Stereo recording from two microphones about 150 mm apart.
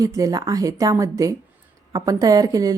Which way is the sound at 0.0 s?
20° right (ahead or behind).